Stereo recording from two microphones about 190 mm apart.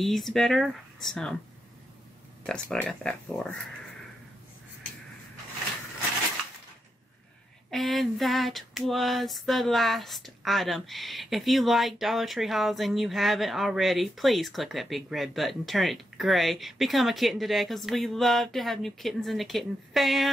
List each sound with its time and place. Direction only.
0.0 s female singing: centre (ahead or behind)
2.4 s female singing: 5° left (ahead or behind)
7.7 s female singing: centre (ahead or behind)